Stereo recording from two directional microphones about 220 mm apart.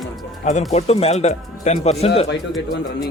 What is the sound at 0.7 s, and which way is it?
Speech, 30° left (ahead or behind).